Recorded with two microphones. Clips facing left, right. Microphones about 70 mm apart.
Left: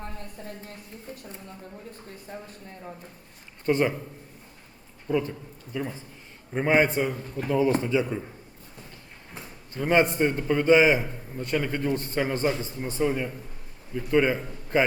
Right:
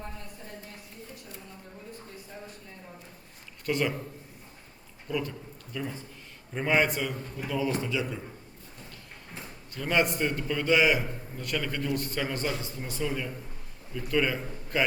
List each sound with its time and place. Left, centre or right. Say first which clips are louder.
3.7 s a man's voice: left 5 dB; left
5.0 s a man's voice: left 6 dB; left
9.7 s a man's voice: left 5 dB; left